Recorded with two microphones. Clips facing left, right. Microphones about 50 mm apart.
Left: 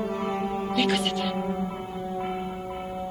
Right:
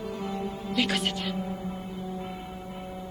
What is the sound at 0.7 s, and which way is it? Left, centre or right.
Speech, centre.